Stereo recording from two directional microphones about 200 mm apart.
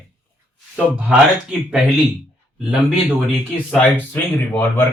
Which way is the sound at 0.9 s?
5° right (ahead or behind).